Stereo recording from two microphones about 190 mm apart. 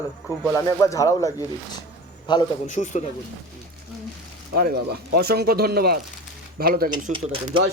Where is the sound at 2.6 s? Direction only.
40° left (ahead or behind).